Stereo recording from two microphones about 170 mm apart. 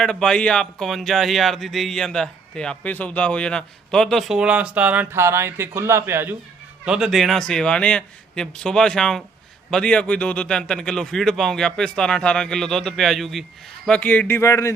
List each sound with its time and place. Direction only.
0.0 s a man's voice: 5° left (ahead or behind)